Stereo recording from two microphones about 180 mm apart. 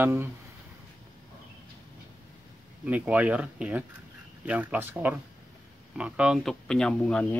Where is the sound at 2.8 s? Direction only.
5° right (ahead or behind).